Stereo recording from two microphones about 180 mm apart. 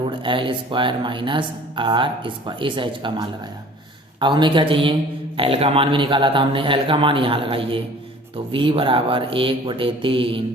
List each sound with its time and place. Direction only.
0.1 s speech: 30° right (ahead or behind)